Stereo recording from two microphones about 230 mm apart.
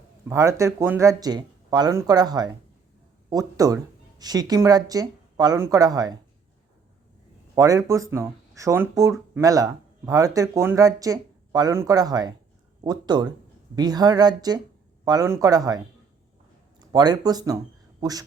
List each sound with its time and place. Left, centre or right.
0.3 s speech: centre
7.5 s speech: centre
16.9 s speech: centre